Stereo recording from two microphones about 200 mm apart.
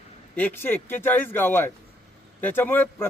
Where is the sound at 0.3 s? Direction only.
10° left (ahead or behind).